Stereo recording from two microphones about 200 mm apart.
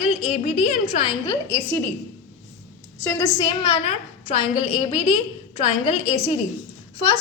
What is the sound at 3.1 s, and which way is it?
A woman's voice, 15° left (ahead or behind).